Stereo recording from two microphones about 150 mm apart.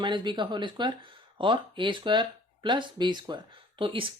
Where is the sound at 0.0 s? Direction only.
30° right (ahead or behind).